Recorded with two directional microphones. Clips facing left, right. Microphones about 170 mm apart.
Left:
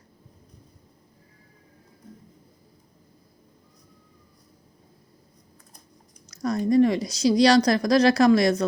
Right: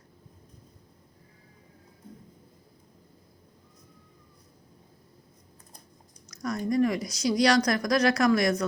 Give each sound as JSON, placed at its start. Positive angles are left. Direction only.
{"t": 6.2, "sound": "speech", "side_deg": 30}